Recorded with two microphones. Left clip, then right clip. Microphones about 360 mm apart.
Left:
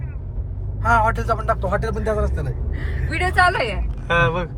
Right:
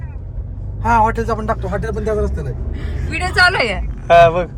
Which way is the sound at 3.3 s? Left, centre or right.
Right.